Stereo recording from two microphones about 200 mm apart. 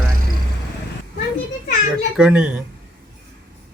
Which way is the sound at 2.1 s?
5° right (ahead or behind).